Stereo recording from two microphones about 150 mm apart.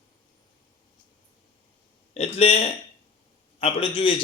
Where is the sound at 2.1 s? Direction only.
45° left (ahead or behind).